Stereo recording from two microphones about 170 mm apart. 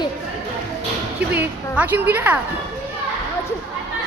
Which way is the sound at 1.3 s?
10° right (ahead or behind).